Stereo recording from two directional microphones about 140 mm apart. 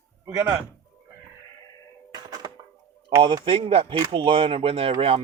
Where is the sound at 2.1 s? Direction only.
30° right (ahead or behind).